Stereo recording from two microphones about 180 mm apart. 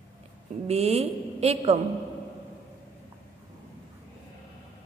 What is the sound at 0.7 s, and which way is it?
A woman's voice, 35° right (ahead or behind).